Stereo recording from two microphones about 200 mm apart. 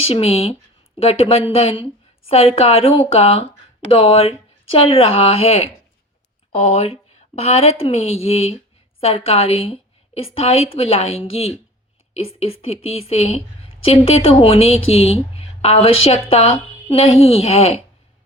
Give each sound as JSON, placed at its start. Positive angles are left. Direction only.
{"t": 0.0, "sound": "a woman's voice", "side_deg": 30}